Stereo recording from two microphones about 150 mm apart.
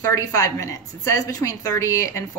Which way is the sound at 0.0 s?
20° left (ahead or behind).